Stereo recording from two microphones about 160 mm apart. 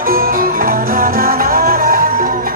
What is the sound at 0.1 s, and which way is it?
Music, 65° right (ahead or behind).